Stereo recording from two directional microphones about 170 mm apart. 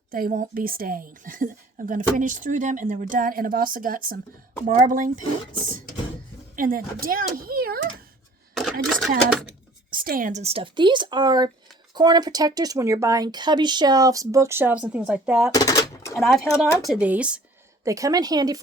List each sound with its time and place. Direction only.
0.1 s a woman's voice: 55° right (ahead or behind)
6.6 s speech: 55° right (ahead or behind)
8.5 s a sound: centre (ahead or behind)
9.9 s speech: 55° right (ahead or behind); by 15.5 s 10° right (ahead or behind)
15.5 s a sound: 20° left (ahead or behind)
16.1 s speech: centre (ahead or behind)
17.8 s speech: 20° right (ahead or behind)